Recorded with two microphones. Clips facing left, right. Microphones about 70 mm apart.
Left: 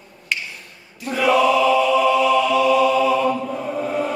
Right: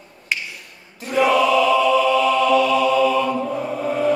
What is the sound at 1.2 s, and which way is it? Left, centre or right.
Chant, right.